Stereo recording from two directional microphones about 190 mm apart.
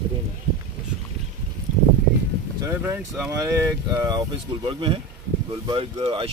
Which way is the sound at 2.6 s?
10° right (ahead or behind).